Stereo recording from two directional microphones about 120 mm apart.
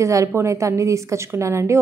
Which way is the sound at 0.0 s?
25° right (ahead or behind).